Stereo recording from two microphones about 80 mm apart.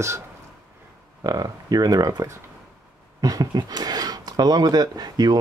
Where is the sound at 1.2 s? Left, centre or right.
Right.